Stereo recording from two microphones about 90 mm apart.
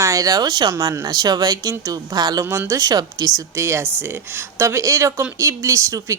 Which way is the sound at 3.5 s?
30° right (ahead or behind).